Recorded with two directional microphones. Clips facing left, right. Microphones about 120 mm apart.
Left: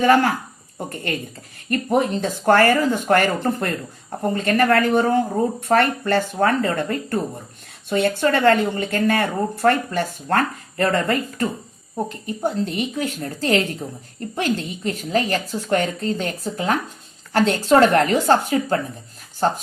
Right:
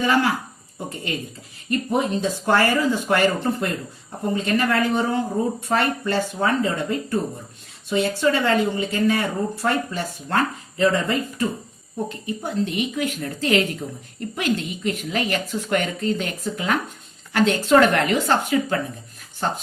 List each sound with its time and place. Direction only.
0.0 s speech: 50° left (ahead or behind)
1.7 s speech: 55° left (ahead or behind)
12.2 s a woman's voice: 35° left (ahead or behind)